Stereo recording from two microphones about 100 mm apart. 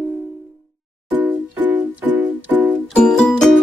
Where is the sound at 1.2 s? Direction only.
20° right (ahead or behind).